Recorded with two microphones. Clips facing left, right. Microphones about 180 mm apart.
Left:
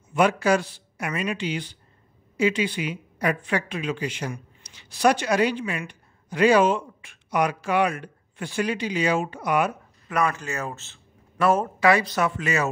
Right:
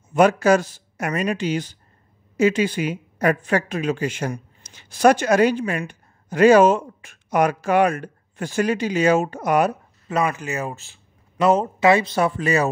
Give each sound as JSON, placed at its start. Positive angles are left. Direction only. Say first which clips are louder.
{"t": 0.1, "sound": "speech", "louder": "right 5 dB", "side_deg": -45}
{"t": 10.0, "sound": "a man's voice", "louder": "right 2 dB", "side_deg": -25}